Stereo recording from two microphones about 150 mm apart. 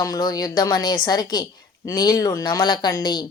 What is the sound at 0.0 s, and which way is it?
Speech, 25° left (ahead or behind).